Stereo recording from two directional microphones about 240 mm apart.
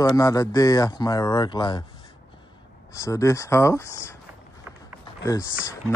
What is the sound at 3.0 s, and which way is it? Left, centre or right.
A man's voice, centre.